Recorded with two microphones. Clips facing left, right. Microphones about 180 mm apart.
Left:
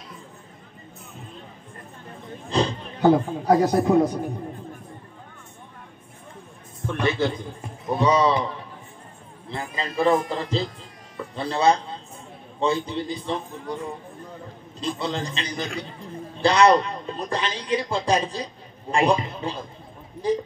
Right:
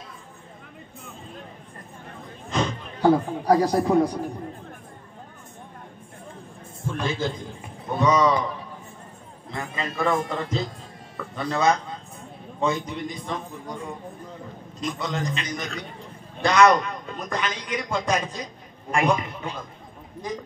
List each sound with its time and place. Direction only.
2.5 s speech: 30° left (ahead or behind)
6.9 s a sound: 65° left (ahead or behind)
8.0 s a man's voice: 30° left (ahead or behind)
9.8 s a man's voice: 30° left (ahead or behind)
14.8 s a man's voice: 30° left (ahead or behind)